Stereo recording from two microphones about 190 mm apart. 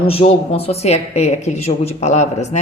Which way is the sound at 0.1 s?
30° left (ahead or behind).